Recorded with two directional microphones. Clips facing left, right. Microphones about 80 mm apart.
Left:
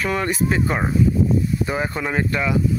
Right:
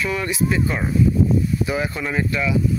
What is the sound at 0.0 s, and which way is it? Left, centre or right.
Speech, left.